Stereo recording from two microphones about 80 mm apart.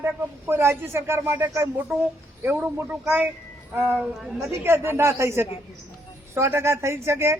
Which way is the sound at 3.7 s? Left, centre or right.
Right.